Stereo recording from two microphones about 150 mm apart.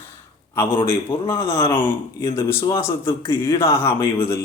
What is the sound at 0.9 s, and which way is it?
Speech, 15° left (ahead or behind).